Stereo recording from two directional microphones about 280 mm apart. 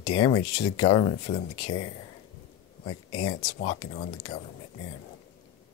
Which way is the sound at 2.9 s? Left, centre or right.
Centre.